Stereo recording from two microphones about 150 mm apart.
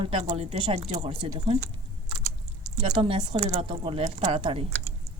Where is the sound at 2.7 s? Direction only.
45° right (ahead or behind).